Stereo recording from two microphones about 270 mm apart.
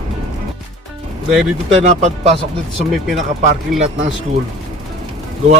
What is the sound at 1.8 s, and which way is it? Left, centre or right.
Speech, right.